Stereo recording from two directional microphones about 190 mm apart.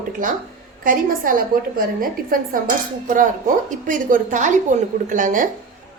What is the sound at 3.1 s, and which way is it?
A woman's voice, 45° right (ahead or behind).